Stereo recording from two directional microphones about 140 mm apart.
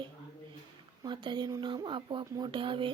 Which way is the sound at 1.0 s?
35° right (ahead or behind).